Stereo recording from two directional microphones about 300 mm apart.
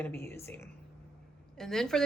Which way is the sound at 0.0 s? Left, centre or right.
Centre.